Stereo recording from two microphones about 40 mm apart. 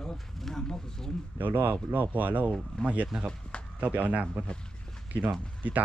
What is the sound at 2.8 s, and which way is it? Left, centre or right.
Speech, left.